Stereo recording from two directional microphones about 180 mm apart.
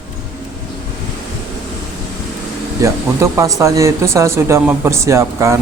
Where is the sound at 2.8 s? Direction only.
15° right (ahead or behind).